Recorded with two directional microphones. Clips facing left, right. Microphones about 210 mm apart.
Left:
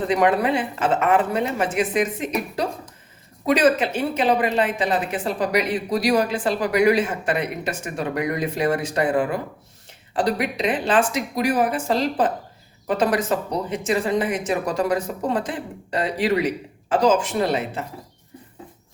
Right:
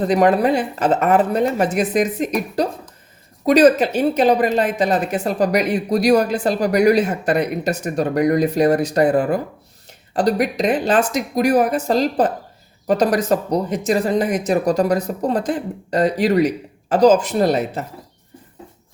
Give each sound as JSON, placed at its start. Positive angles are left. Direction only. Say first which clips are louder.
{"t": 0.0, "sound": "a woman's voice", "louder": "right 4 dB", "side_deg": -35}